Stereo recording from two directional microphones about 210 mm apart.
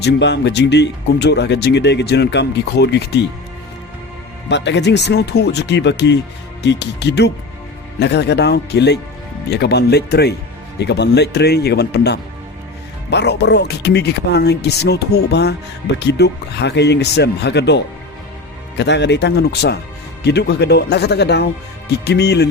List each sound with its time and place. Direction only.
0.0 s speech: 55° left (ahead or behind)
4.4 s speech: 55° left (ahead or behind)